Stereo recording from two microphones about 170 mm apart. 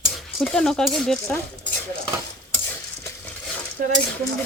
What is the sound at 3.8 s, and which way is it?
Speech, 50° right (ahead or behind).